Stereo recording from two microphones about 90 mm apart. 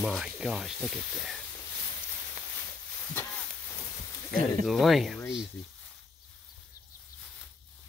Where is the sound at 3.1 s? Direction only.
20° left (ahead or behind).